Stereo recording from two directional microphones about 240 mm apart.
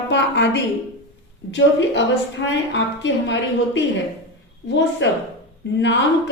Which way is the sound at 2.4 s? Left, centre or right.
Left.